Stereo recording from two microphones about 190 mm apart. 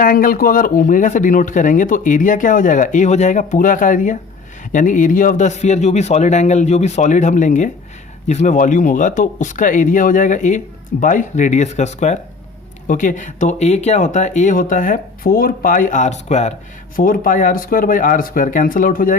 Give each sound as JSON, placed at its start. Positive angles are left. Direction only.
{"t": 0.0, "sound": "speech", "side_deg": 45}